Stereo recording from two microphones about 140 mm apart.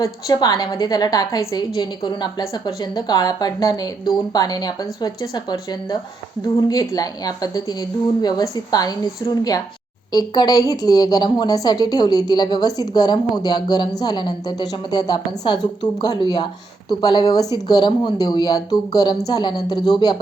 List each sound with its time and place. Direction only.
0.0 s a woman's voice: 25° left (ahead or behind)